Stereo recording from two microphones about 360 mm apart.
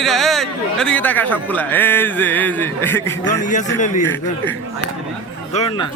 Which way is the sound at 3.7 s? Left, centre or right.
Left.